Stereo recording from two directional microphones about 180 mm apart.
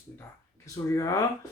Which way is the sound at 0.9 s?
20° left (ahead or behind).